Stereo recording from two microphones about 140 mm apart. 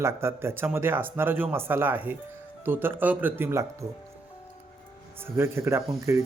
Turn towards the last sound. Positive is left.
turn(degrees=-20)  # may be behind; listen again after turning